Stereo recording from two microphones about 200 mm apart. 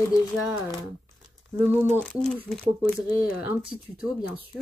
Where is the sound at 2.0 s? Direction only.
5° left (ahead or behind).